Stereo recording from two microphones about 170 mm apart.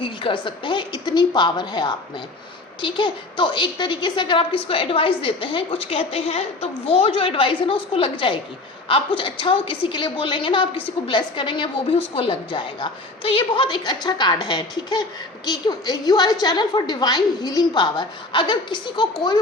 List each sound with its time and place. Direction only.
0.0 s a woman's voice: 30° left (ahead or behind)